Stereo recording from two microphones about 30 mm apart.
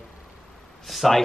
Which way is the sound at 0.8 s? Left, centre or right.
Centre.